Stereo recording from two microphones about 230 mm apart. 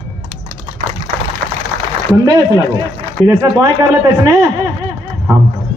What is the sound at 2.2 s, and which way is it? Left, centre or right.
Speech, centre.